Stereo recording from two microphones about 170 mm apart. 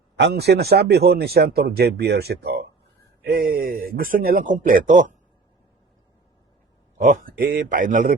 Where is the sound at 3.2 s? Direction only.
60° right (ahead or behind).